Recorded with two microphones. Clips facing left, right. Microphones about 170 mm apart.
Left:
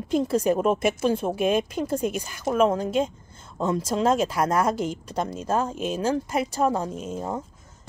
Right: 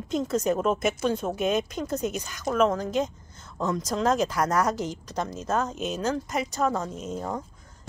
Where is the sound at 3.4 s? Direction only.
30° left (ahead or behind).